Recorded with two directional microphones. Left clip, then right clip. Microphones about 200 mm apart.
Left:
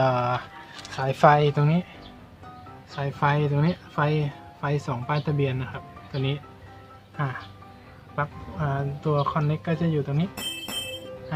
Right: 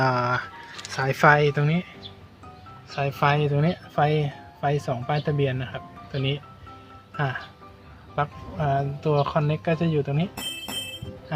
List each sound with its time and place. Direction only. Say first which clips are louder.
0.0 s music: even; 10° right (ahead or behind)
0.9 s speech: even; 10° right (ahead or behind)
2.9 s speech: right 2 dB; 20° right (ahead or behind)
8.1 s speech: right 3 dB; 35° right (ahead or behind)
10.3 s music: even; centre (ahead or behind)
11.3 s music: right 2 dB; 30° right (ahead or behind)